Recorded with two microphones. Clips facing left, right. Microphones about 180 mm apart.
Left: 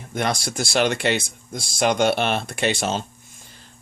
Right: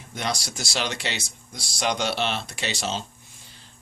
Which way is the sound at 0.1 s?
55° left (ahead or behind).